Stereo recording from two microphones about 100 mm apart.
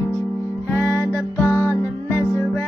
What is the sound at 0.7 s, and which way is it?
Music, 30° left (ahead or behind).